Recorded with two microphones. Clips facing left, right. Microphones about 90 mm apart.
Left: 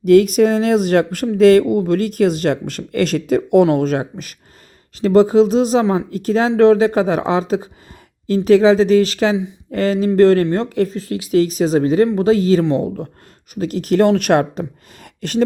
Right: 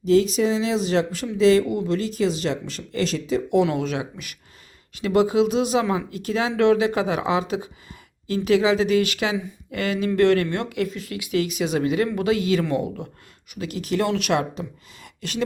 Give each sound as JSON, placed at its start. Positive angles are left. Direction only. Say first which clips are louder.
{"t": 0.0, "sound": "speech", "louder": "left 7 dB", "side_deg": 60}